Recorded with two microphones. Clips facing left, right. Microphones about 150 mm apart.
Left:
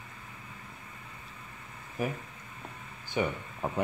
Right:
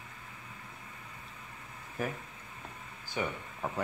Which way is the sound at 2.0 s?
10° left (ahead or behind).